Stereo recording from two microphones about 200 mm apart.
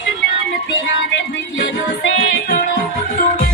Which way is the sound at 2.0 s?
60° left (ahead or behind).